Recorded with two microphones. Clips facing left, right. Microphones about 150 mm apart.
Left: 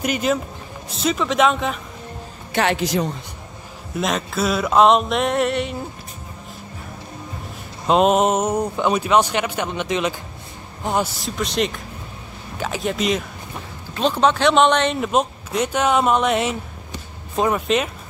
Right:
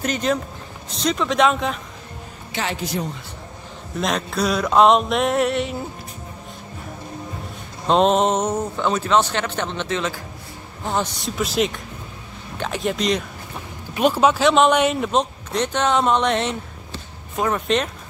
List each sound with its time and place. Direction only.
0.0 s speech: 10° left (ahead or behind)
0.9 s music: 5° left (ahead or behind)
2.5 s a man's voice: 70° left (ahead or behind); by 3.1 s 90° left
3.9 s music: centre (ahead or behind)
7.8 s a man's voice: 5° left (ahead or behind)
11.1 s music: centre (ahead or behind)
13.9 s speech: 10° right (ahead or behind)
15.0 s speech: 5° left (ahead or behind)
17.5 s music: 5° left (ahead or behind)